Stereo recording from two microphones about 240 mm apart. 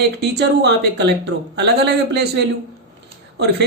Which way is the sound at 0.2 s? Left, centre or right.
Right.